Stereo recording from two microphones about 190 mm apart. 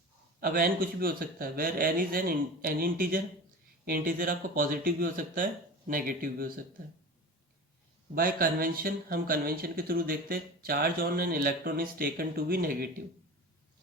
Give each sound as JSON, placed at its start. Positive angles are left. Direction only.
{"t": 0.3, "sound": "speech", "side_deg": -50}
{"t": 8.1, "sound": "speech", "side_deg": -50}